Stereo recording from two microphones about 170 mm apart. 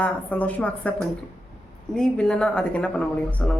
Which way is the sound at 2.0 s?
5° left (ahead or behind).